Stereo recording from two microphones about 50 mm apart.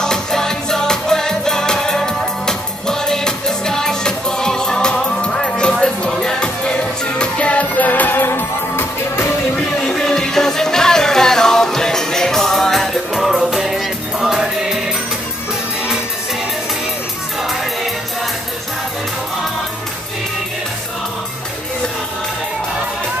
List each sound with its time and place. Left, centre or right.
0.0 s music: centre; by 9.3 s left
9.8 s music: centre